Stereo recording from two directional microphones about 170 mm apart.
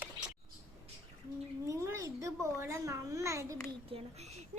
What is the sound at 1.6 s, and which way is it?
Babbling, 15° right (ahead or behind).